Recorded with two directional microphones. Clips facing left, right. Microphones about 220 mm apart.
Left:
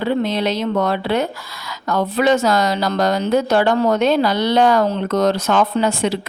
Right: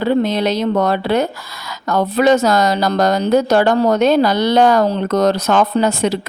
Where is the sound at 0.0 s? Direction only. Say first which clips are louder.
Right 3 dB; 40° right (ahead or behind).